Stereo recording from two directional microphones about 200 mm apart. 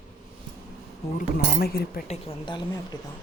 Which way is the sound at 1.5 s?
50° left (ahead or behind).